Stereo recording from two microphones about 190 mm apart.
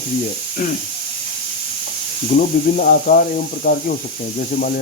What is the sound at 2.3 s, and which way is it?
Speech, 40° left (ahead or behind).